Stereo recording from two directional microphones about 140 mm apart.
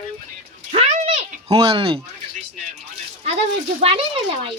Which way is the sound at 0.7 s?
50° right (ahead or behind).